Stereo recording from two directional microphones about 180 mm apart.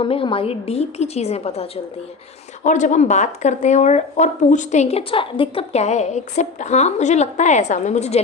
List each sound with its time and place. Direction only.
0.0 s speech: 30° left (ahead or behind)